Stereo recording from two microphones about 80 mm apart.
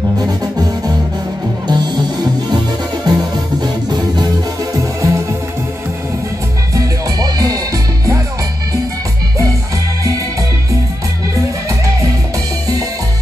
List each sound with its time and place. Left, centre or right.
0.2 s music: right
3.1 s music: right
4.7 s music: right
6.7 s music: right